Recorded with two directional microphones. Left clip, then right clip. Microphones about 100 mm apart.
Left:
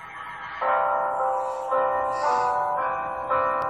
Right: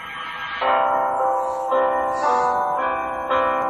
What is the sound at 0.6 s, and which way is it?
Music, 25° right (ahead or behind).